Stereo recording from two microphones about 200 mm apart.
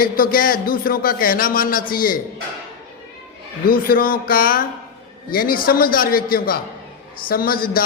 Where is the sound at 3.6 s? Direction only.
45° left (ahead or behind).